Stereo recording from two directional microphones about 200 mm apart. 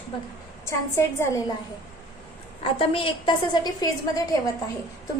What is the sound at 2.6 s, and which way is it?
A woman's voice, 25° left (ahead or behind).